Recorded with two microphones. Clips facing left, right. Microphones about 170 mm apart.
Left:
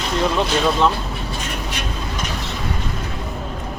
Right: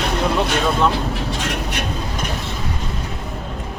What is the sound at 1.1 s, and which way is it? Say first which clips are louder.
Vehicle: right 4 dB; 80° right.